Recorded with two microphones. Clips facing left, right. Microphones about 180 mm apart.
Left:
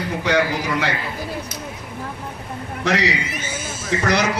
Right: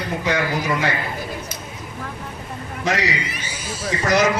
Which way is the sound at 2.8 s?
70° left (ahead or behind).